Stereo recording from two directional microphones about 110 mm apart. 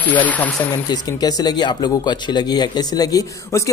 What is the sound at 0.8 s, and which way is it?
Speech, 35° left (ahead or behind).